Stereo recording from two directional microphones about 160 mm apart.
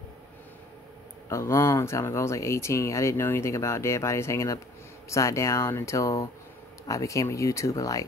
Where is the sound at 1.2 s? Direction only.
15° left (ahead or behind).